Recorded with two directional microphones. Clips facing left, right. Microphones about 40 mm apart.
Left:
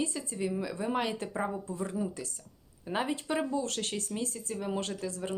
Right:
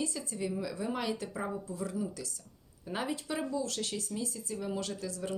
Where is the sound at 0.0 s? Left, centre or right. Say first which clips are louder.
Left 2 dB; left.